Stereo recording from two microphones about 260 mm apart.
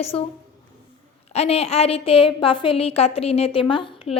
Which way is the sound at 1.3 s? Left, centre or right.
Left.